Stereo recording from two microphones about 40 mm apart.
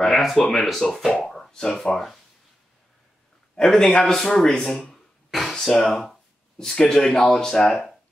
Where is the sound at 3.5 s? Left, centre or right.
Centre.